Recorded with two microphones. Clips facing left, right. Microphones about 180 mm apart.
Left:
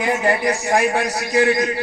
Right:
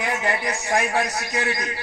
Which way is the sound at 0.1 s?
35° left (ahead or behind).